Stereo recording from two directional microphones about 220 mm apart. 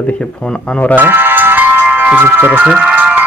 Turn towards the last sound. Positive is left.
turn(degrees=-5)  # may be behind; listen again after turning